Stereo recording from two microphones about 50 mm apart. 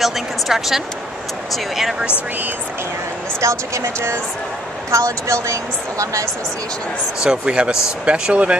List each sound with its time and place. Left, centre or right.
0.0 s a woman's voice: centre
3.3 s speech: right
4.9 s a woman's voice: right
7.2 s speech: right